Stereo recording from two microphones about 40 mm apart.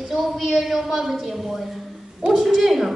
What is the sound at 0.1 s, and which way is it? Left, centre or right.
A woman's voice, centre.